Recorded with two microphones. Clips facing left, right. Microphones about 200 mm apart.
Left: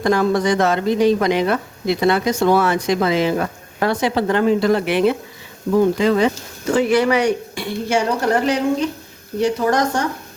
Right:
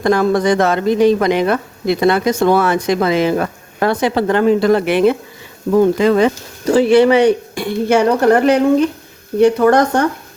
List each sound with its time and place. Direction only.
0.0 s speech: 55° right (ahead or behind)
5.7 s speech: 65° right (ahead or behind)
6.0 s speech: 55° right (ahead or behind)
6.7 s speech: 30° right (ahead or behind)
7.5 s speech: 55° right (ahead or behind)